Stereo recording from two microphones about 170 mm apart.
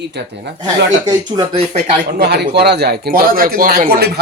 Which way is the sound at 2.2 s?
75° right (ahead or behind).